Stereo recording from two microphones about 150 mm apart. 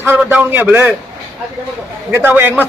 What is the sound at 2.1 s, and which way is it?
Speech, 15° right (ahead or behind).